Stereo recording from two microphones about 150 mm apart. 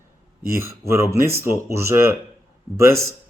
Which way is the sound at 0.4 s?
20° right (ahead or behind).